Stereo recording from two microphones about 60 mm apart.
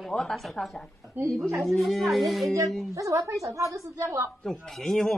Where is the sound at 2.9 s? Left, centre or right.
Right.